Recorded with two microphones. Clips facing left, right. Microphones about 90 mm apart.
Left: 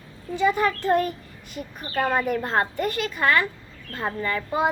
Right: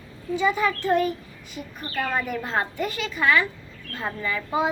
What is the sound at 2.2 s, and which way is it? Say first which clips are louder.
A child's voice: left 3 dB; 45° left (ahead or behind).